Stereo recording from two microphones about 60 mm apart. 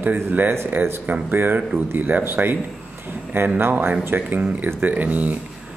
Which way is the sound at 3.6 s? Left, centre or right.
Right.